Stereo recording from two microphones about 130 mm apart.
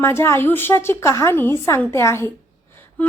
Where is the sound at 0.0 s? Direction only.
20° left (ahead or behind).